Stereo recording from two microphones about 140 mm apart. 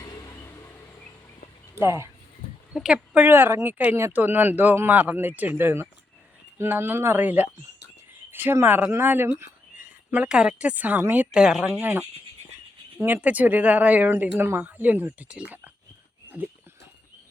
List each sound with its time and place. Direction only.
0.0 s vehicle: 25° left (ahead or behind)
2.7 s a woman's voice: 5° right (ahead or behind)
13.2 s speech: 10° right (ahead or behind)